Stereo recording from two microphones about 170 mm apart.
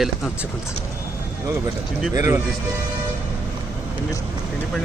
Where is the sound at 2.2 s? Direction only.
20° right (ahead or behind).